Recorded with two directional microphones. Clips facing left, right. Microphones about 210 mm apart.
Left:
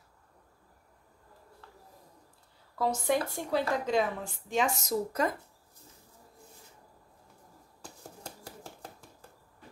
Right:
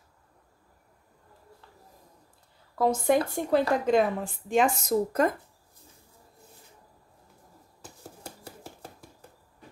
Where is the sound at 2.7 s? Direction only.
50° right (ahead or behind).